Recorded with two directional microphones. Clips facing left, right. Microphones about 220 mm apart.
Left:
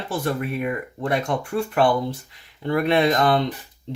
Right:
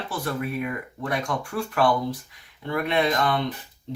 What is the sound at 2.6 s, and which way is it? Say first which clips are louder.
Speech: left 5 dB; 35° left (ahead or behind).